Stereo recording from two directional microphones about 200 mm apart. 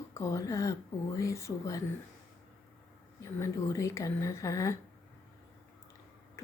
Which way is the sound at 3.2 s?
15° left (ahead or behind).